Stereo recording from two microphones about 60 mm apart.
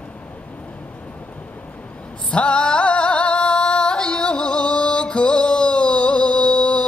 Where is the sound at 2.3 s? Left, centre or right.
Centre.